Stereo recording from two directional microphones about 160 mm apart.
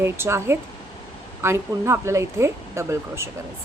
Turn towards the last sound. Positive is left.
turn(degrees=-15)  # may be behind; listen again after turning